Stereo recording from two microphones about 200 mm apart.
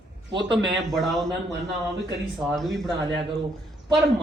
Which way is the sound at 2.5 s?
Centre (ahead or behind).